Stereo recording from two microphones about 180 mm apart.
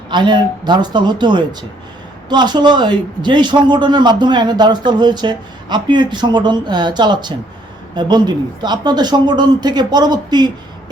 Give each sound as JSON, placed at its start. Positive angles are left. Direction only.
{"t": 0.1, "sound": "a man's voice", "side_deg": -25}